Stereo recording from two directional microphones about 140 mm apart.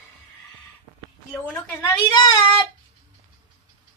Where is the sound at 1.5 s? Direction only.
25° left (ahead or behind).